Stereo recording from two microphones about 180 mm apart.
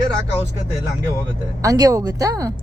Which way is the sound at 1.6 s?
20° right (ahead or behind).